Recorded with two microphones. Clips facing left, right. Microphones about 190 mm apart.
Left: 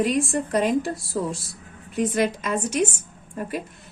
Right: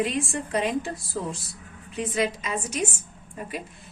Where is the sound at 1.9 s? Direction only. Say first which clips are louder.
Left 4 dB; 45° left (ahead or behind).